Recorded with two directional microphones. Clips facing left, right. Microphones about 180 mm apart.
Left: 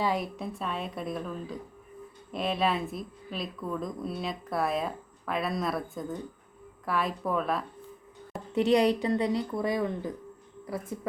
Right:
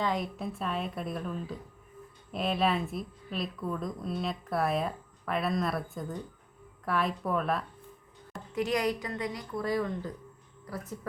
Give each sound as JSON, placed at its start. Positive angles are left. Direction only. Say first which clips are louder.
{"t": 0.0, "sound": "a woman's voice", "louder": "left 2 dB", "side_deg": 5}
{"t": 8.5, "sound": "a woman's voice", "louder": "left 6 dB", "side_deg": 30}
{"t": 9.6, "sound": "a woman's voice", "louder": "left 2 dB", "side_deg": 20}